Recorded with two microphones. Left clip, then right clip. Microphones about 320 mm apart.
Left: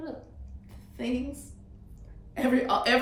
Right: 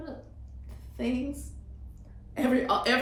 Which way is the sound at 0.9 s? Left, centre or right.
Centre.